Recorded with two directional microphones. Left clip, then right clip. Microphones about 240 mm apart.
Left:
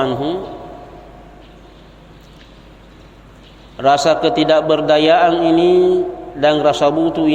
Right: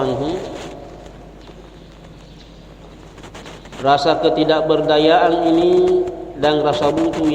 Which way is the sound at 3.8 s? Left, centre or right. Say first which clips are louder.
Left 2 dB; left.